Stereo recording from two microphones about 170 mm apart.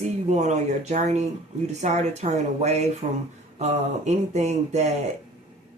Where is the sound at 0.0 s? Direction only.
45° right (ahead or behind).